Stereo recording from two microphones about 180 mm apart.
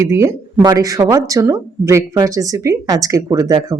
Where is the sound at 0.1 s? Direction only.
15° right (ahead or behind).